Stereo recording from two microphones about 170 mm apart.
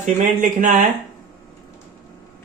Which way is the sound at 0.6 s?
50° right (ahead or behind).